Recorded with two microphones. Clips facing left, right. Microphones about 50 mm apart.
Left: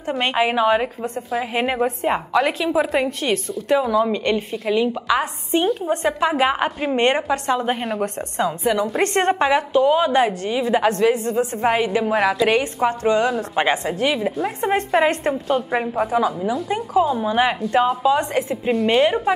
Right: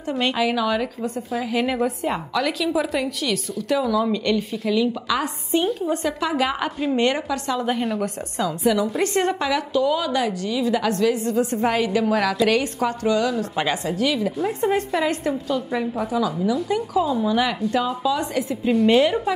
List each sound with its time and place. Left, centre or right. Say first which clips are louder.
0.2 s a woman's voice: left 3 dB; left
9.0 s a woman's voice: left 3 dB; left
18.9 s a woman's voice: left 2 dB; left